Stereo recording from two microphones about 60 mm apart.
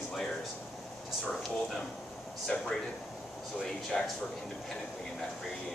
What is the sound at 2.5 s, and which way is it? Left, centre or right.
Speech, centre.